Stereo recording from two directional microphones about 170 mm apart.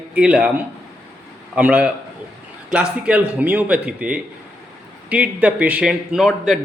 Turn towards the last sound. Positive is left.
turn(degrees=0)  # may be behind; listen again after turning